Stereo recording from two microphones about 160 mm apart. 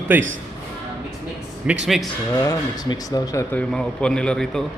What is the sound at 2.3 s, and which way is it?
Speech, 20° left (ahead or behind).